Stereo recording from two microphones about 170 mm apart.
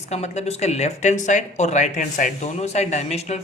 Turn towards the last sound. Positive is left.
turn(degrees=40)  # may be behind; listen again after turning